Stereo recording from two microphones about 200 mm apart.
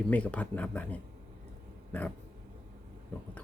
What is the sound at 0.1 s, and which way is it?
Speech, 5° left (ahead or behind).